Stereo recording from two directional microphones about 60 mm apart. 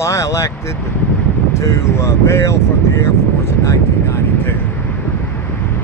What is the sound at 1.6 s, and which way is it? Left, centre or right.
Speech, left.